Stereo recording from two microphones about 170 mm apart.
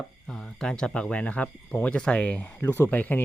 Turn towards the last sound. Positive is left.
turn(degrees=10)  # may be behind; listen again after turning